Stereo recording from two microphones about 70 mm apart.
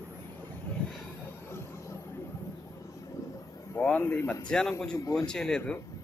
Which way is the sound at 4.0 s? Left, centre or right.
Left.